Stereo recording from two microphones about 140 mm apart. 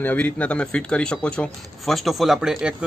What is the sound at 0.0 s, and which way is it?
Speech, 10° left (ahead or behind).